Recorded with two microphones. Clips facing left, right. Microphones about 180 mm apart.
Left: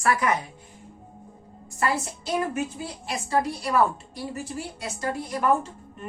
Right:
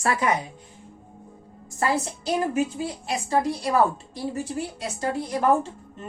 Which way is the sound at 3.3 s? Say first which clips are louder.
Right 1 dB; 25° right (ahead or behind).